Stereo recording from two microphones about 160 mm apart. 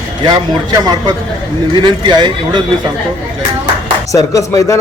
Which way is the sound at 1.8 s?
30° right (ahead or behind).